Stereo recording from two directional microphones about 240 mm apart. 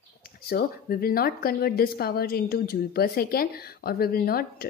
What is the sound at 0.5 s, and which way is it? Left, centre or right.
A woman's voice, left.